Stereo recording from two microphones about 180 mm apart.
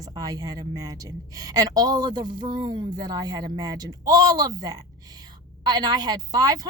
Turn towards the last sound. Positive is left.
turn(degrees=-20)  # may be behind; listen again after turning